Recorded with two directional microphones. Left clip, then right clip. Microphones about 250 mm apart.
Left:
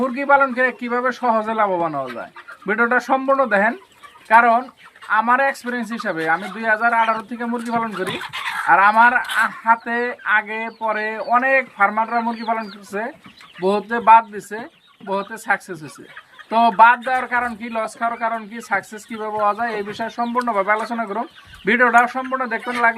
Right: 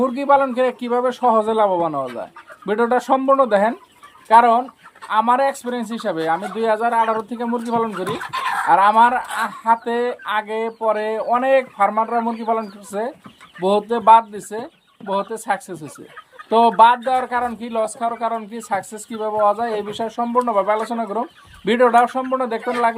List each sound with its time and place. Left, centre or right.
0.0 s speech: centre
16.5 s speech: centre
16.8 s speech: centre